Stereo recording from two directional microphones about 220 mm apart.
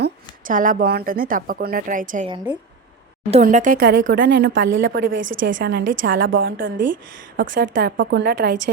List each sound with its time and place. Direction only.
0.0 s speech: 40° right (ahead or behind)
3.4 s a woman's voice: 40° right (ahead or behind)
4.4 s a woman's voice: 55° right (ahead or behind)